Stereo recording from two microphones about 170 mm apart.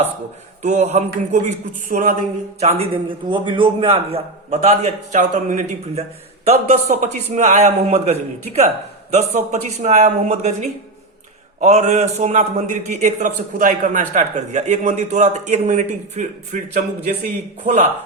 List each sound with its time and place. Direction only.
0.6 s a man's voice: 40° right (ahead or behind)
2.6 s a man's voice: 35° right (ahead or behind)